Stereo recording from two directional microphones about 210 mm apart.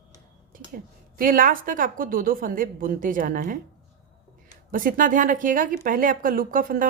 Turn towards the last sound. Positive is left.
turn(degrees=-40)  # may be behind; listen again after turning